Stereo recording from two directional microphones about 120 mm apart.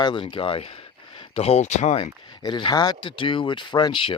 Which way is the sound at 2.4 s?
40° left (ahead or behind).